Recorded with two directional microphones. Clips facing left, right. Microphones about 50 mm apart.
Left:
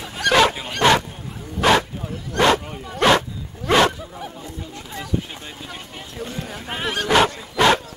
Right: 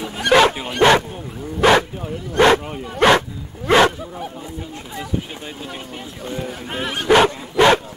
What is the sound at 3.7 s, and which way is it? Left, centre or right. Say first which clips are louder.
Bow-wow: right 3 dB; centre.